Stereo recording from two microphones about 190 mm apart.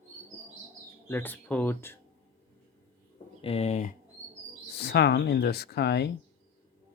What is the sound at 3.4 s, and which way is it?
Speech, 35° left (ahead or behind).